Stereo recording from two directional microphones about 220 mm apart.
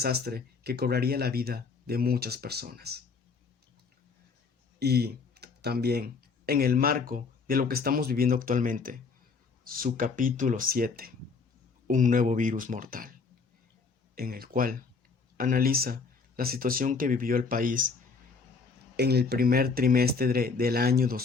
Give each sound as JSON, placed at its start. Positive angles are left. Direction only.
{"t": 0.0, "sound": "speech", "side_deg": -45}
{"t": 4.8, "sound": "speech", "side_deg": -45}
{"t": 14.2, "sound": "speech", "side_deg": -40}
{"t": 18.9, "sound": "speech", "side_deg": -45}